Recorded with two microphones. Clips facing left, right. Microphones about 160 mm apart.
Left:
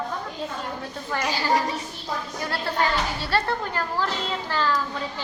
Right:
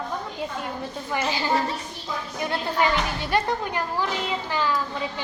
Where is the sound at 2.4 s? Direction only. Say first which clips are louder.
Right 2 dB; 20° right (ahead or behind).